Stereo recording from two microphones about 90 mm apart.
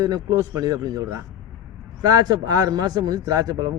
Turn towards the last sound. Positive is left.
turn(degrees=-45)  # may be behind; listen again after turning